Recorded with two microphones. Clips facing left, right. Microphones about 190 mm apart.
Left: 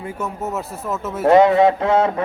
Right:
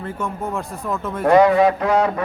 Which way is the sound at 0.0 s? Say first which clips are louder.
Even; 10° left (ahead or behind).